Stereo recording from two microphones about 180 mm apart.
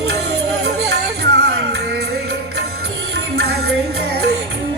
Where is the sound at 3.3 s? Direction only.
65° right (ahead or behind).